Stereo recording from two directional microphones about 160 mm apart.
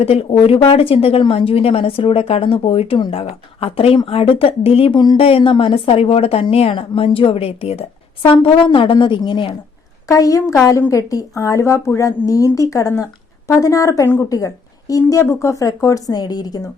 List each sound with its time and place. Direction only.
0.0 s a woman's voice: 35° left (ahead or behind)
10.1 s a woman's voice: 20° left (ahead or behind)